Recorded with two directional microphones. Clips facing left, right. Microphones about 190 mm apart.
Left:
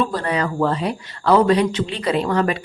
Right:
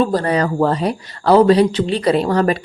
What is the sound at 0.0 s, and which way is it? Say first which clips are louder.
Speech: right 5 dB; 40° right (ahead or behind).